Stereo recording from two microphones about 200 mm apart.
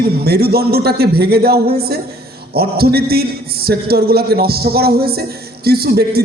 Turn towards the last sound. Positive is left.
turn(degrees=-50)  # may be behind; listen again after turning